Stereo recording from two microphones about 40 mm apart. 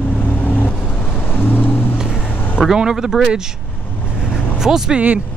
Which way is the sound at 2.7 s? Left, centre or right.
Centre.